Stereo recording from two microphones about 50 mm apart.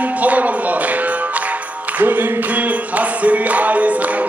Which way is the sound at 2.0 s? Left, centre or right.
Right.